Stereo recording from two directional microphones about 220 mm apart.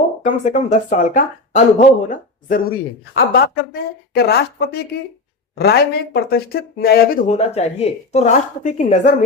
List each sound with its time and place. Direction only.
0.2 s speech: 35° left (ahead or behind)
3.2 s speech: 45° left (ahead or behind)
7.3 s a woman's voice: 30° left (ahead or behind)